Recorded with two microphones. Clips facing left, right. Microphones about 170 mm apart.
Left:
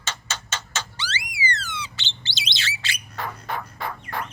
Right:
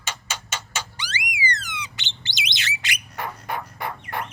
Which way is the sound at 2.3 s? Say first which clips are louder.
Right 2 dB; 15° right (ahead or behind).